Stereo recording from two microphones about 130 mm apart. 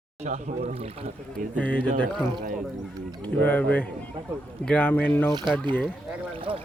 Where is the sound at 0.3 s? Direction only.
80° right.